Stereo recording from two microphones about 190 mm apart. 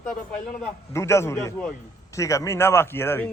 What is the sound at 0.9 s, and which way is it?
Speech, 15° left (ahead or behind).